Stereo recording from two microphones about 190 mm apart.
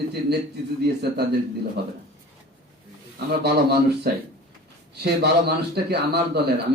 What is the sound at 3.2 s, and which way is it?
Speech, 60° right (ahead or behind).